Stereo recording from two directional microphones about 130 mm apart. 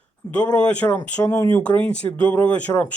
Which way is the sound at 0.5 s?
10° left (ahead or behind).